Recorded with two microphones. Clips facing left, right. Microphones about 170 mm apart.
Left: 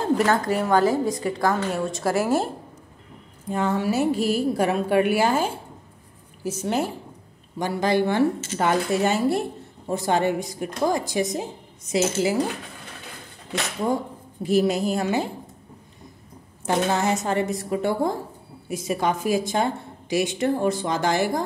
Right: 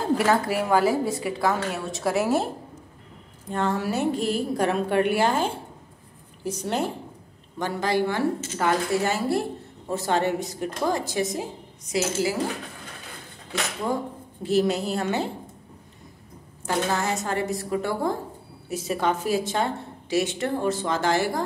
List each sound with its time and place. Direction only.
0.2 s a woman's voice: 5° right (ahead or behind)
7.5 s a woman's voice: 15° left (ahead or behind)
14.4 s a woman's voice: 10° left (ahead or behind)
16.6 s a woman's voice: 20° left (ahead or behind)